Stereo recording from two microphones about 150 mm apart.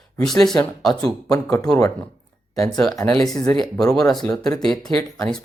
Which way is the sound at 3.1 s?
5° left (ahead or behind).